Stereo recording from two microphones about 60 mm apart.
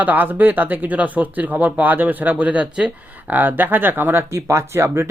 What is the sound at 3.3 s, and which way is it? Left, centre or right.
Speech, right.